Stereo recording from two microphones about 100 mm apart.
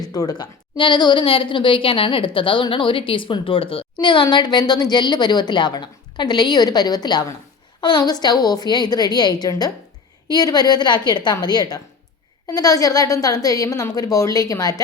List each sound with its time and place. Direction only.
0.0 s a woman's voice: 40° left (ahead or behind)